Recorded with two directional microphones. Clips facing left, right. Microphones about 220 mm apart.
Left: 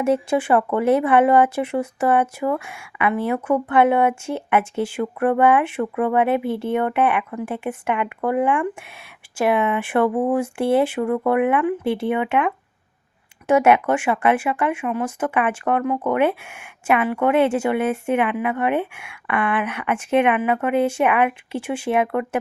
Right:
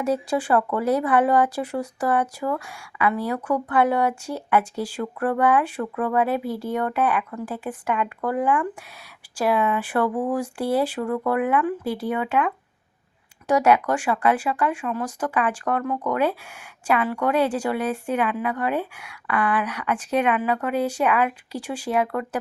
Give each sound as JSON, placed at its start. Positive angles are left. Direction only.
{"t": 0.0, "sound": "a woman's voice", "side_deg": 25}